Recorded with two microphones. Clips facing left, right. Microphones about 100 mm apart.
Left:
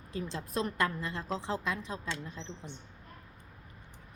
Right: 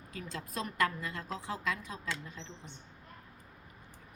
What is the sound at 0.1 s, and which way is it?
A woman's voice, 25° left (ahead or behind).